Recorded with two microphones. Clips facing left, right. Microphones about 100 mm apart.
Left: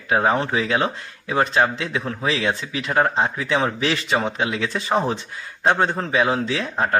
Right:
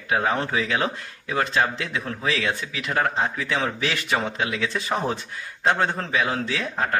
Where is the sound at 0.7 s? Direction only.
30° left (ahead or behind).